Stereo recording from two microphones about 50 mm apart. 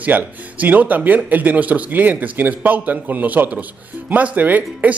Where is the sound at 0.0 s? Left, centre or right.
Right.